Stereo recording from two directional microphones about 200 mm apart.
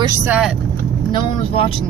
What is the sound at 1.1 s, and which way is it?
Speech, 25° left (ahead or behind).